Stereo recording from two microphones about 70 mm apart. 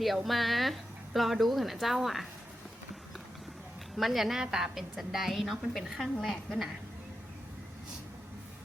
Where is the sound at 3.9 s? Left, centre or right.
Centre.